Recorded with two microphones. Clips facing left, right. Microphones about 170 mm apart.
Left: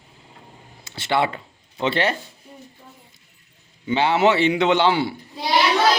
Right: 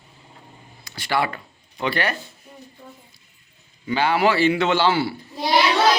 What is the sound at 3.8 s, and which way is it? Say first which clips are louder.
Speech: left 2 dB; 25° left (ahead or behind).